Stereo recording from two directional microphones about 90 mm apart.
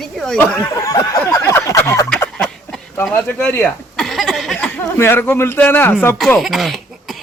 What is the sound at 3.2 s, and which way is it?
Speech, 25° left (ahead or behind).